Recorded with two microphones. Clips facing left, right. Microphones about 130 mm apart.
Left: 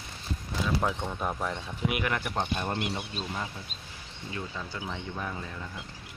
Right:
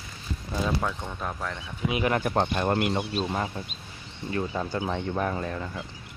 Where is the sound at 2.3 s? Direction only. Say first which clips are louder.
Right 6 dB; 85° right; by 4.8 s 50° right (ahead or behind).